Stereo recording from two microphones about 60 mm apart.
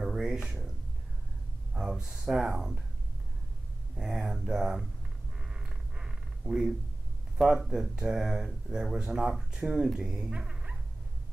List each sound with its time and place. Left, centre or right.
0.0 s a sound: centre
1.7 s speech: centre
3.9 s speech: centre
5.5 s a sound: centre
7.3 s speech: centre
10.3 s dog: centre